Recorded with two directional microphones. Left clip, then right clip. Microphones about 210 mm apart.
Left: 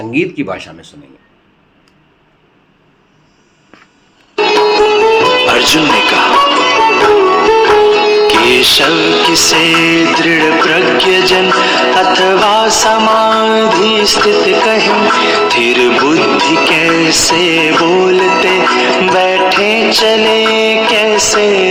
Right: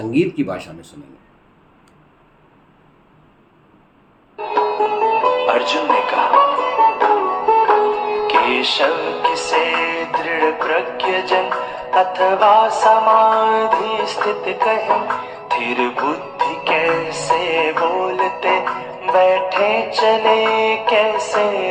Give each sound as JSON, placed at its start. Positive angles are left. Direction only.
{"t": 0.1, "sound": "speech", "side_deg": 5}
{"t": 4.4, "sound": "speech", "side_deg": 45}